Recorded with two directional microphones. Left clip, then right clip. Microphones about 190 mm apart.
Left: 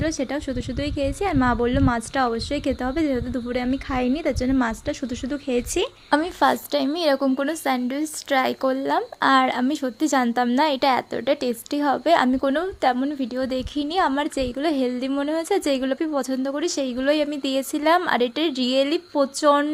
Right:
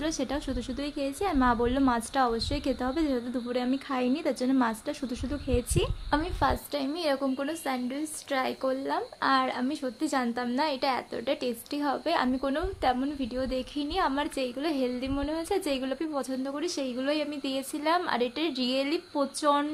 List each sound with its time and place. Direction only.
0.0 s a woman's voice: 20° left (ahead or behind); by 19.6 s 40° left (ahead or behind)